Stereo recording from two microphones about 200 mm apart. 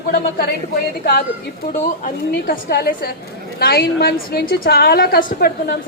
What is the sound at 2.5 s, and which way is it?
A woman's voice, 50° left (ahead or behind).